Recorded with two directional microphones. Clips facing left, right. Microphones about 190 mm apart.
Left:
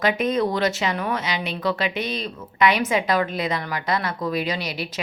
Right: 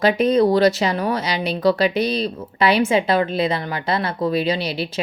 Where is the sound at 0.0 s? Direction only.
35° right (ahead or behind).